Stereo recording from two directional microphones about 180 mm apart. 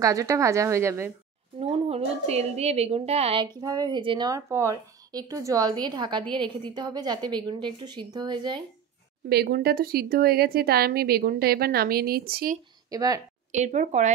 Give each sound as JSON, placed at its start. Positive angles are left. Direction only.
{"t": 0.0, "sound": "a woman's voice", "side_deg": -20}
{"t": 1.6, "sound": "a woman's voice", "side_deg": -35}
{"t": 3.6, "sound": "a woman's voice", "side_deg": -20}
{"t": 9.3, "sound": "a woman's voice", "side_deg": -60}
{"t": 12.9, "sound": "a woman's voice", "side_deg": -20}
{"t": 13.5, "sound": "a woman's voice", "side_deg": -40}